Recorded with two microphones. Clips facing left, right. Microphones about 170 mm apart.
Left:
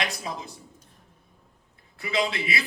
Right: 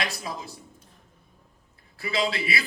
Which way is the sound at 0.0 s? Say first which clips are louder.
Left 1 dB; 20° left (ahead or behind).